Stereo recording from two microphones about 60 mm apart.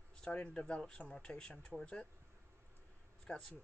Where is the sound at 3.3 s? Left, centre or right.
Centre.